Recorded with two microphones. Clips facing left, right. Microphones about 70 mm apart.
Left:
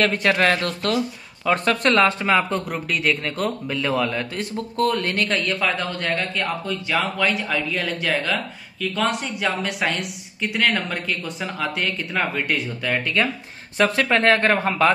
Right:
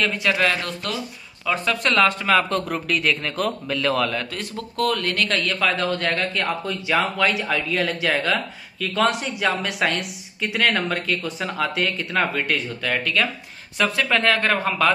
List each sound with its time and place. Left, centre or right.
0.0 s speech: left
0.3 s speech: left
0.8 s speech: left
1.8 s speech: left
2.5 s speech: centre
4.1 s speech: left
5.4 s a woman's voice: centre
12.9 s speech: left
13.7 s speech: left